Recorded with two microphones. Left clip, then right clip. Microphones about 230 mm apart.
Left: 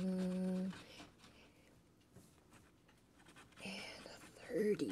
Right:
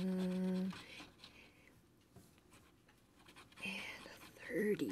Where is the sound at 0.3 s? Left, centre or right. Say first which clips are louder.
Right 1 dB; centre.